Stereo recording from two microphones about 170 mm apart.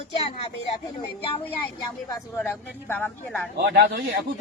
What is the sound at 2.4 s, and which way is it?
Speech, 10° left (ahead or behind).